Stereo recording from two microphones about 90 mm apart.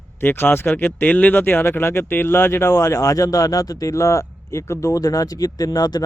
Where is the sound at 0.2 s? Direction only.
20° left (ahead or behind).